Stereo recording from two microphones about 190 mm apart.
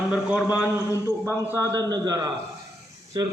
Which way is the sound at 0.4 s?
15° left (ahead or behind).